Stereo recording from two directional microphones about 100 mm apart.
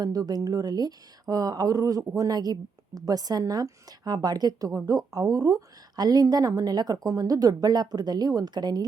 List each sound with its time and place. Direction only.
0.0 s speech: 40° right (ahead or behind)